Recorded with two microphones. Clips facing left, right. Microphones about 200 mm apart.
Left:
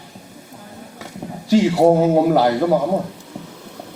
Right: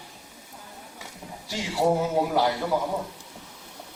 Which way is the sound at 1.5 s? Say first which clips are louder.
Left 11 dB; 65° left (ahead or behind).